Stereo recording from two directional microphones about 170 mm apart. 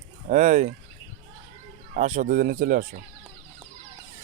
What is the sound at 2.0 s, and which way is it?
Speech, 50° right (ahead or behind).